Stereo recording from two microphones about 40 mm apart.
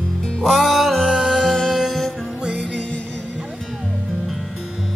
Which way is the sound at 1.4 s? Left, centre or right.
Centre.